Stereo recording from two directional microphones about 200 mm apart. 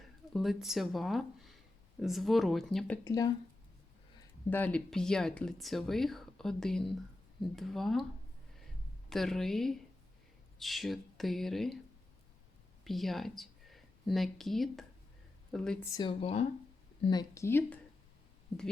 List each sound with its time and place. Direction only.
0.3 s speech: centre (ahead or behind); by 3.3 s 15° left (ahead or behind)
4.4 s speech: 10° left (ahead or behind)
9.0 s speech: centre (ahead or behind)
12.8 s speech: centre (ahead or behind)
16.0 s speech: 25° left (ahead or behind); by 17.7 s 10° left (ahead or behind)